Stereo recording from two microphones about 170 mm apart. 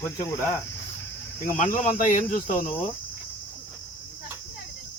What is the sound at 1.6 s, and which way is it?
Cricket, 50° left (ahead or behind).